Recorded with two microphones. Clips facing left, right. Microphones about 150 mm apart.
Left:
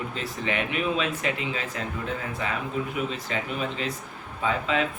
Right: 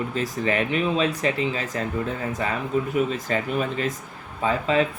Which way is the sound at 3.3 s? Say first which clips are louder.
Right 5 dB; 45° right (ahead or behind).